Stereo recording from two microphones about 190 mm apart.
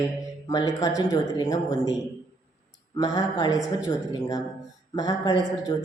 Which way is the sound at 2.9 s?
20° left (ahead or behind).